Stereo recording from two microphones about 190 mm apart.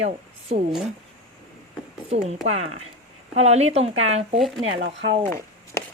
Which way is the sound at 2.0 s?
35° right (ahead or behind).